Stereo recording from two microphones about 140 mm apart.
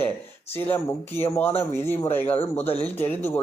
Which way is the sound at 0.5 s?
15° left (ahead or behind).